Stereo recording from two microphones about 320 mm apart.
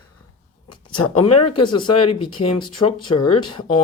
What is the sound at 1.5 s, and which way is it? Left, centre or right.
Speech, centre.